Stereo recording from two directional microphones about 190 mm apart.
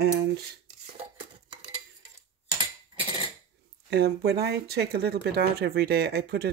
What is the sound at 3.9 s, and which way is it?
Speech, 60° right (ahead or behind).